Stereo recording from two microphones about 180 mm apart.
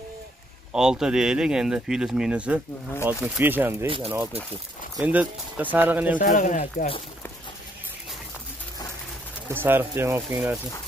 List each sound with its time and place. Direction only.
0.7 s speech: 5° right (ahead or behind)
3.8 s speech: 30° right (ahead or behind)
5.0 s speech: 10° right (ahead or behind)
6.1 s speech: 50° left (ahead or behind)
9.5 s speech: 10° right (ahead or behind)